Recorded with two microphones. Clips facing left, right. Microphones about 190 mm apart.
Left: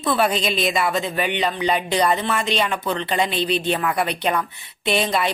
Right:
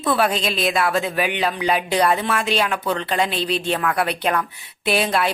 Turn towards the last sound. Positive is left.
turn(degrees=-5)  # may be behind; listen again after turning